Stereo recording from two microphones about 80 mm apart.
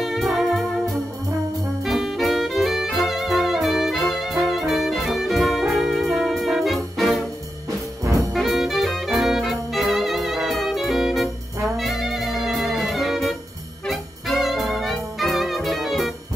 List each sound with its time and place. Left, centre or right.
0.0 s music: centre
1.9 s music: centre
8.0 s brass instrument: right
8.3 s music: centre